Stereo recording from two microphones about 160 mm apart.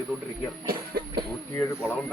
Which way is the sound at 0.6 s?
70° right (ahead or behind).